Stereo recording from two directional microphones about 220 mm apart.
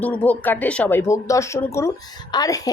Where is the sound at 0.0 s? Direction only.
10° left (ahead or behind).